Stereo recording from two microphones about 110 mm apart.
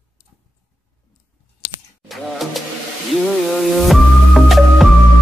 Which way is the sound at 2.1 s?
Centre (ahead or behind).